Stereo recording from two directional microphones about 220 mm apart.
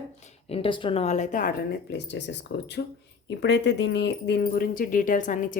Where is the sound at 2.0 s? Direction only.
50° left (ahead or behind).